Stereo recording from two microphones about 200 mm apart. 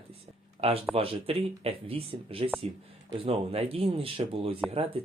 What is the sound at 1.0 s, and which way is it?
Speech, 30° right (ahead or behind).